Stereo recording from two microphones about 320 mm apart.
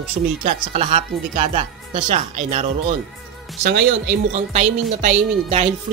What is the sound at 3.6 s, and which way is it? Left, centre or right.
Speech, right.